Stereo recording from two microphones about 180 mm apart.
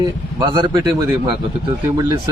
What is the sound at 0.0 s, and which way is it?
A man's voice, 25° right (ahead or behind).